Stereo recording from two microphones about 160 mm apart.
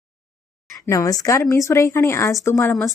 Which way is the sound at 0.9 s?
20° left (ahead or behind).